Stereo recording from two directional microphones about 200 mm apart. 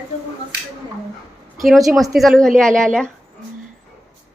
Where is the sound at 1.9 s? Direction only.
Centre (ahead or behind).